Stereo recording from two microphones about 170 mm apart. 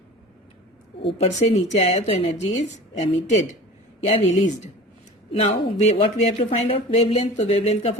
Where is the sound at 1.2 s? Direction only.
40° left (ahead or behind).